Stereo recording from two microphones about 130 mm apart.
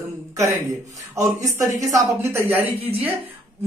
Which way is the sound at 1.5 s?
25° right (ahead or behind).